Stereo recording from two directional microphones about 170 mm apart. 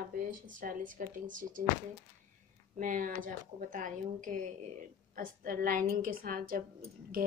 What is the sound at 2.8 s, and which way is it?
A woman's voice, 50° right (ahead or behind).